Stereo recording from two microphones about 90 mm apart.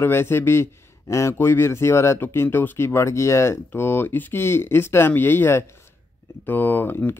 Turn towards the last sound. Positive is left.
turn(degrees=20)  # may be behind; listen again after turning